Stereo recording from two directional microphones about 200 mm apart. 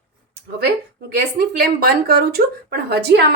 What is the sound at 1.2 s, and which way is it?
A woman's voice, 50° right (ahead or behind).